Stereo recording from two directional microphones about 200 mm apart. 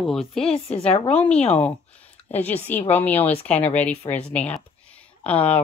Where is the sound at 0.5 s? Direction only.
30° left (ahead or behind).